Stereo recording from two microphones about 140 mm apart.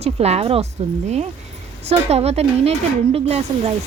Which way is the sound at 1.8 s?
50° right (ahead or behind).